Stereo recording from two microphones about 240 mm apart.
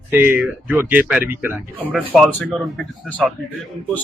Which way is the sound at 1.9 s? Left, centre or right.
Centre.